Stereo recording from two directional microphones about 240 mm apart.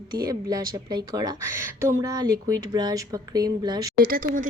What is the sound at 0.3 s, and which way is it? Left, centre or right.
A woman's voice, centre.